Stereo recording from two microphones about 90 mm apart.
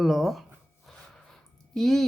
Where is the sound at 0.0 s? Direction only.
Centre (ahead or behind).